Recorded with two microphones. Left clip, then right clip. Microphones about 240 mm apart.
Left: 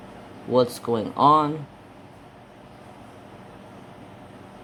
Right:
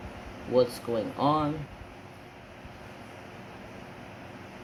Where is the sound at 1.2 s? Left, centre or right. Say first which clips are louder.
Left 10 dB; left.